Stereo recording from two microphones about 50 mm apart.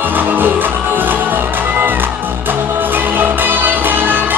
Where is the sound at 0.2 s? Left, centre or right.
Right.